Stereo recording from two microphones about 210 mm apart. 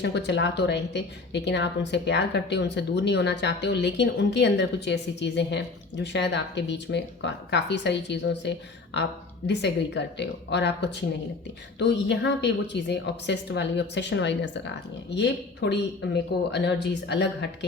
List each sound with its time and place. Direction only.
0.0 s a woman's voice: 55° left (ahead or behind)